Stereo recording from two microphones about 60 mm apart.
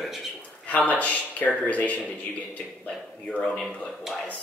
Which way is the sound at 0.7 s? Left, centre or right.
Left.